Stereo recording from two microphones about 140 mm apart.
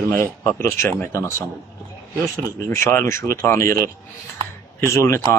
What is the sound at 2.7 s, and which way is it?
Speech, 20° left (ahead or behind).